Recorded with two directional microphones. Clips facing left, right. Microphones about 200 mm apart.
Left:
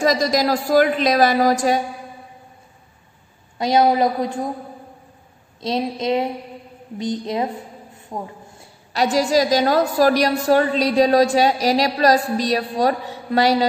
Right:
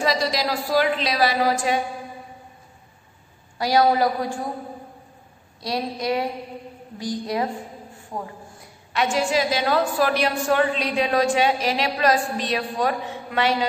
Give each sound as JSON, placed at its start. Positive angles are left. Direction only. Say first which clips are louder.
{"t": 0.0, "sound": "a woman's voice", "louder": "left 5 dB", "side_deg": 45}
{"t": 3.5, "sound": "a woman's voice", "louder": "left 2 dB", "side_deg": 20}
{"t": 5.6, "sound": "a woman's voice", "louder": "left 4 dB", "side_deg": 25}
{"t": 8.9, "sound": "a woman's voice", "louder": "left 4 dB", "side_deg": 35}